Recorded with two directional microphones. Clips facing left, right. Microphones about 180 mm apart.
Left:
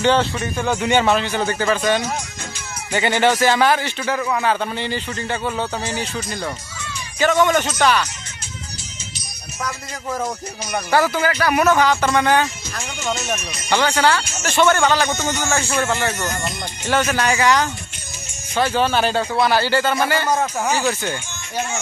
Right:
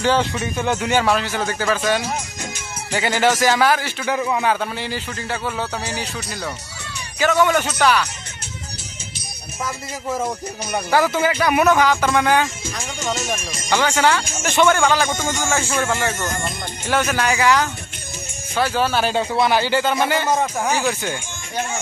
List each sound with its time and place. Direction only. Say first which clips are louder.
0.0 s a man's voice: left 1 dB; 10° right (ahead or behind)
4.1 s a man's voice: right 1 dB; 15° right (ahead or behind)
7.2 s speech: left 1 dB; 5° right (ahead or behind)
9.6 s a man's voice: right 1 dB; 5° right (ahead or behind)
19.1 s a man's voice: even; 20° right (ahead or behind)
20.2 s speech: even; centre (ahead or behind)